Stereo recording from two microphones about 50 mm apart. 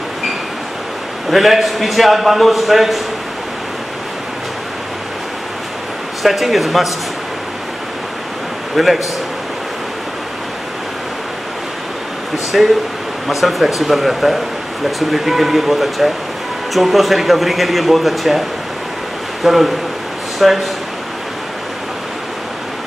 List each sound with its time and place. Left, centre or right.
1.3 s a man's voice: centre
6.2 s a man's voice: centre
8.7 s a man's voice: centre
12.5 s a man's voice: centre
19.4 s a man's voice: centre